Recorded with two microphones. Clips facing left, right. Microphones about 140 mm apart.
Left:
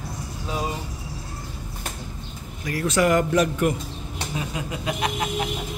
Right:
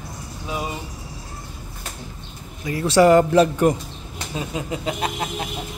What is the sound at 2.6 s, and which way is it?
Speech, 25° right (ahead or behind).